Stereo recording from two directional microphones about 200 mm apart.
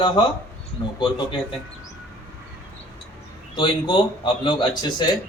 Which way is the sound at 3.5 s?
25° left (ahead or behind).